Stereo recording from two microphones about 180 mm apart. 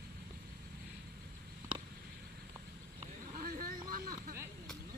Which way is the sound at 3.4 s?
50° right (ahead or behind).